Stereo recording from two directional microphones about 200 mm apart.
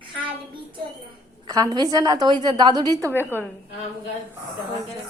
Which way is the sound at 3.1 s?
10° left (ahead or behind).